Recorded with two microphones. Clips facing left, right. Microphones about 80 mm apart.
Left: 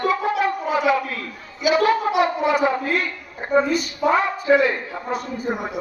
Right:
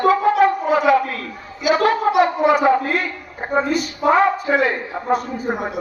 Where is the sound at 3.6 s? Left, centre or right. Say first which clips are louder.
Right 2 dB; right.